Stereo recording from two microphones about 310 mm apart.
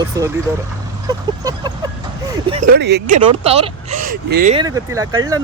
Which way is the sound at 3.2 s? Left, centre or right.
Centre.